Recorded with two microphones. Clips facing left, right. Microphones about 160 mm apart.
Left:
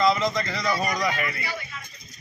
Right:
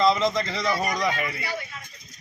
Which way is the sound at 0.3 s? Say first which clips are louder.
Right 1 dB; 25° right (ahead or behind).